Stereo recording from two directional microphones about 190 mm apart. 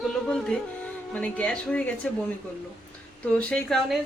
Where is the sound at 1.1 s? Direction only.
5° left (ahead or behind).